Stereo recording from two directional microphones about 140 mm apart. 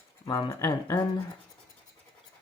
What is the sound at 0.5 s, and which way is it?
Speech, 20° left (ahead or behind).